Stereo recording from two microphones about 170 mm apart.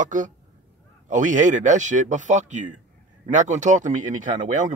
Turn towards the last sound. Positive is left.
turn(degrees=-50)  # may be behind; listen again after turning